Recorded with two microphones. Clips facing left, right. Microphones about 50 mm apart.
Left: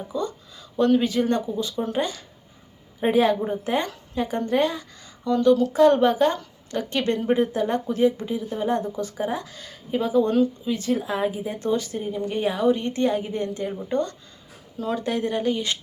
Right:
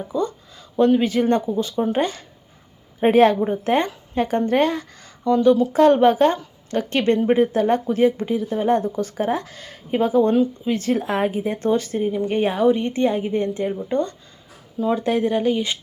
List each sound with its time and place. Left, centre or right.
0.1 s a woman's voice: right
0.8 s speech: centre
1.0 s a woman's voice: right
5.2 s speech: right
5.9 s a woman's voice: right